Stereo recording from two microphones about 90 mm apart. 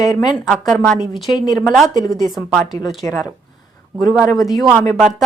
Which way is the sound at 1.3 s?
50° left (ahead or behind).